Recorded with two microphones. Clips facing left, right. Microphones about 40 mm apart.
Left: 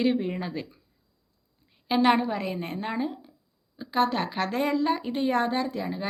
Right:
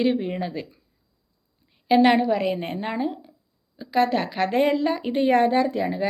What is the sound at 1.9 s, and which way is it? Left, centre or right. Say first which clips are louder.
A woman's voice: right 5 dB; centre.